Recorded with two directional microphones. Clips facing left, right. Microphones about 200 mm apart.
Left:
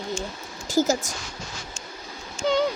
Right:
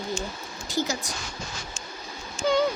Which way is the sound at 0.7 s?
50° left (ahead or behind).